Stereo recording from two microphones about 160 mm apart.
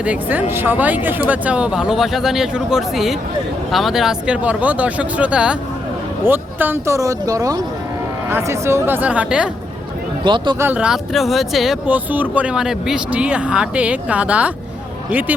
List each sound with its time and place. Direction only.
0.0 s speech: 10° right (ahead or behind)
10.2 s speech: 30° right (ahead or behind)
10.6 s speech: 10° right (ahead or behind)